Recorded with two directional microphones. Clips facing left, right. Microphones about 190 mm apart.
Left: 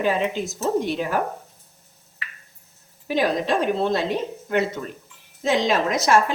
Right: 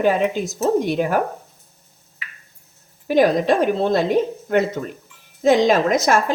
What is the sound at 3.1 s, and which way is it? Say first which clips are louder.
A woman's voice: right 6 dB; 45° right (ahead or behind).